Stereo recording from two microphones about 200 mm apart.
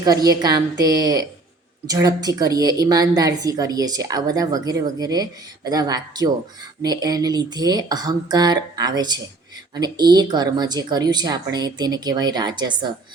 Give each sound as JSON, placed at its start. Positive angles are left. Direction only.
{"t": 0.0, "sound": "a woman's voice", "side_deg": -20}